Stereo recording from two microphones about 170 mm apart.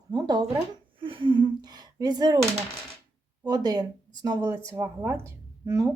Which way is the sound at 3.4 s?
25° right (ahead or behind).